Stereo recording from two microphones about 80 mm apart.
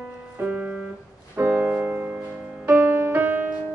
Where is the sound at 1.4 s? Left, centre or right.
Centre.